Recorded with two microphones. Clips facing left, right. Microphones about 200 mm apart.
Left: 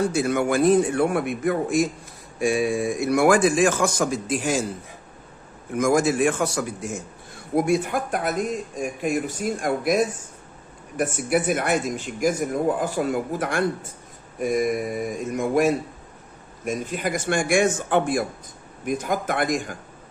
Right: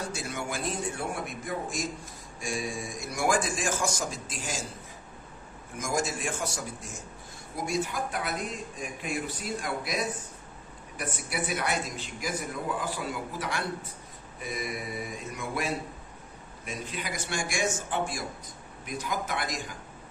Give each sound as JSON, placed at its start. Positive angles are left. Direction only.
{"t": 0.1, "sound": "a man's voice", "side_deg": 60}
{"t": 5.8, "sound": "a man's voice", "side_deg": 60}